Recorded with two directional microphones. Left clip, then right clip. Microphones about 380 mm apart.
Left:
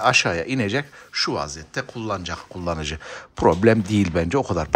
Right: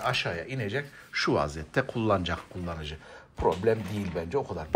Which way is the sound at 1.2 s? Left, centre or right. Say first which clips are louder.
Left 1 dB; centre.